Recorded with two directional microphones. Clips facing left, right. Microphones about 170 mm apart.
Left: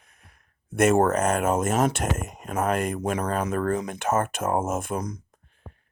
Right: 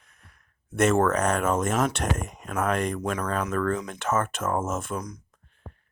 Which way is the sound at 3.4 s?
30° left (ahead or behind).